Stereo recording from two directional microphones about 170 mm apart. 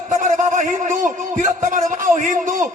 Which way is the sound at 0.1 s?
50° right (ahead or behind).